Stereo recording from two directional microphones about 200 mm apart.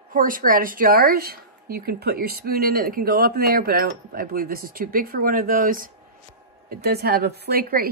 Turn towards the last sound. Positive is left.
turn(degrees=-50)  # may be behind; listen again after turning